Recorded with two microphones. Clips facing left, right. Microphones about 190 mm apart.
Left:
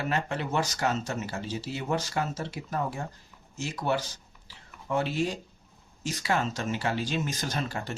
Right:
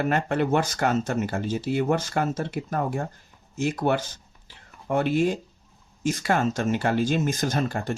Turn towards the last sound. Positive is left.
turn(degrees=-50)  # may be behind; listen again after turning